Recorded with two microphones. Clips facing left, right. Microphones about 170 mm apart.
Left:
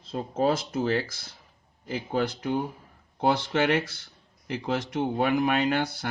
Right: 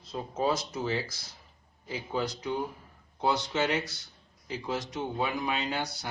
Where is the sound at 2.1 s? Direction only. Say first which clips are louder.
Left 4 dB; 60° left (ahead or behind).